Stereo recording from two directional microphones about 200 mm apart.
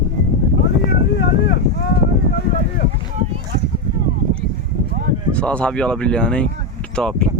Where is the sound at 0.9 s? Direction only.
60° left (ahead or behind).